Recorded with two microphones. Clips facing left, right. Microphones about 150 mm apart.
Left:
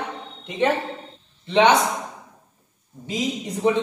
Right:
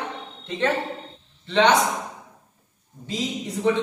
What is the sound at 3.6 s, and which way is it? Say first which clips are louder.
Speech: left 2 dB; 20° left (ahead or behind).